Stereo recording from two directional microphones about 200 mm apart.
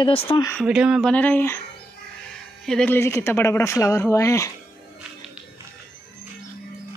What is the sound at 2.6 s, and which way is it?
Speech, 5° left (ahead or behind).